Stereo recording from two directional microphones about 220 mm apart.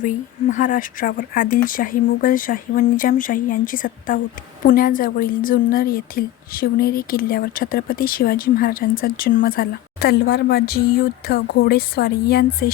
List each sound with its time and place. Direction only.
0.0 s a woman's voice: 35° left (ahead or behind)